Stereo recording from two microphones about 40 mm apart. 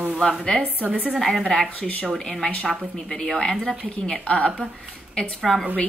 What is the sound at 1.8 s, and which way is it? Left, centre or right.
Speech, left.